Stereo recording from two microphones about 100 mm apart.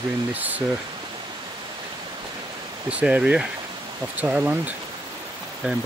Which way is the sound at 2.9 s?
10° right (ahead or behind).